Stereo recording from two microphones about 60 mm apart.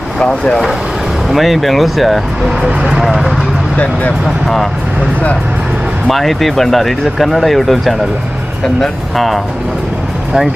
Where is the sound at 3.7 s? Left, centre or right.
Left.